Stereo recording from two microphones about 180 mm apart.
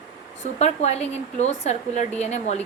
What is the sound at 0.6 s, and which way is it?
A woman's voice, 35° left (ahead or behind).